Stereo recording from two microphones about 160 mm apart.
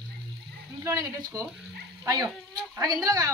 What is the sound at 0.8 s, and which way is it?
Speech, 20° right (ahead or behind).